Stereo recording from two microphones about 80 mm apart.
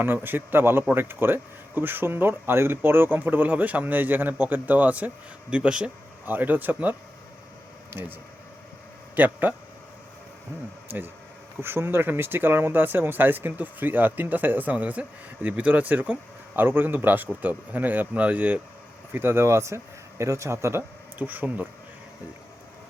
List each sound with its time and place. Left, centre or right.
0.0 s speech: right
6.2 s speech: right
9.1 s speech: right
10.8 s speech: right
19.1 s speech: right